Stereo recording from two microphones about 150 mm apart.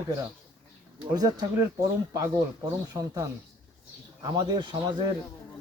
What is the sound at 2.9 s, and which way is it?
Speech, 20° right (ahead or behind).